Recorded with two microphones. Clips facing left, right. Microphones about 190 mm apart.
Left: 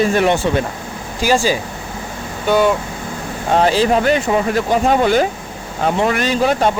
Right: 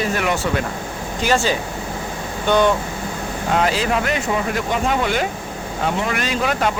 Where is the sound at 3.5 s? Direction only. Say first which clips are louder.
Left 6 dB; 30° left (ahead or behind).